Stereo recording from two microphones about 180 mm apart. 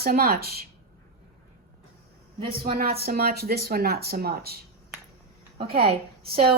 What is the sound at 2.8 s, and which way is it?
A woman's voice, 60° right (ahead or behind).